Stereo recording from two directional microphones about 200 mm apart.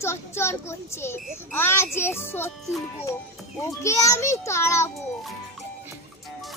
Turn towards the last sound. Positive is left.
turn(degrees=15)  # may be behind; listen again after turning